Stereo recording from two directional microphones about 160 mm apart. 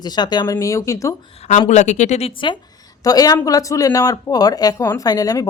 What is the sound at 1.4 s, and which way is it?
A woman's voice, 40° left (ahead or behind).